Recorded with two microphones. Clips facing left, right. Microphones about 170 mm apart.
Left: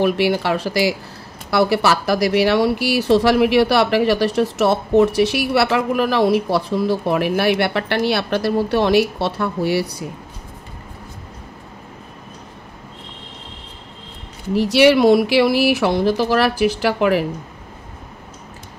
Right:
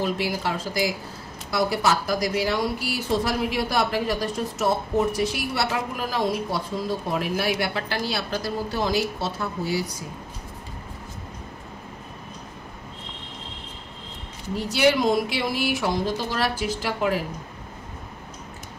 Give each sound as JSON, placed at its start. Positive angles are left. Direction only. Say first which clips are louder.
{"t": 0.0, "sound": "speech", "louder": "left 8 dB", "side_deg": 70}
{"t": 14.6, "sound": "speech", "louder": "left 8 dB", "side_deg": 75}